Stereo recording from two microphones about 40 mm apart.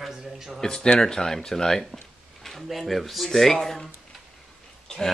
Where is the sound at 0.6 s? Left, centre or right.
Centre.